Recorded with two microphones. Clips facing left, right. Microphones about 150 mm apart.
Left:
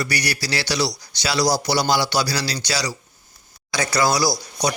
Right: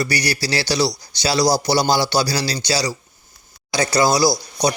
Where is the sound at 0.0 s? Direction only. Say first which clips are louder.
Right 3 dB; 30° right (ahead or behind).